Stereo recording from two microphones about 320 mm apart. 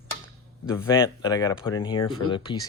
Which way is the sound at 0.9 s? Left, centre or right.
Centre.